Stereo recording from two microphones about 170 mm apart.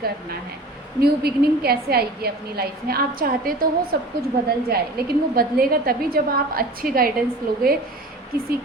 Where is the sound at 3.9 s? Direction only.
70° right (ahead or behind).